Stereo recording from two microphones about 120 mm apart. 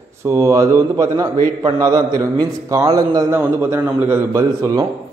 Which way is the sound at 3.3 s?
20° right (ahead or behind).